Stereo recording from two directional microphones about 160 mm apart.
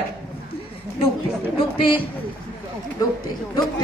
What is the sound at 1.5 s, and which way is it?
Speech, 35° left (ahead or behind).